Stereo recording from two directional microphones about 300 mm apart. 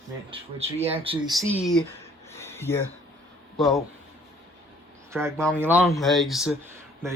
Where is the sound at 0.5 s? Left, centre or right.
Centre.